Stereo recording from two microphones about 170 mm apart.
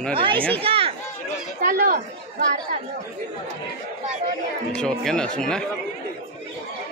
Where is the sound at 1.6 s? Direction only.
55° right (ahead or behind).